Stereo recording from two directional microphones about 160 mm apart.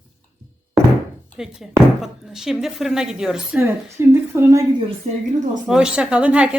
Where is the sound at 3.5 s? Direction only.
15° right (ahead or behind).